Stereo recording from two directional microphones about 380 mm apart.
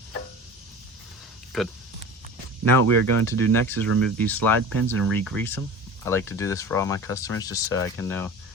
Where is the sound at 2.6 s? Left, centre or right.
Right.